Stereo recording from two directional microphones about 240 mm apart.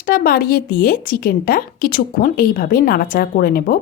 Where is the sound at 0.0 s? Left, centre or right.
Left.